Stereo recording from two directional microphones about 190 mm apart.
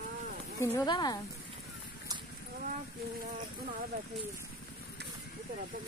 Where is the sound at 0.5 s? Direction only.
15° left (ahead or behind).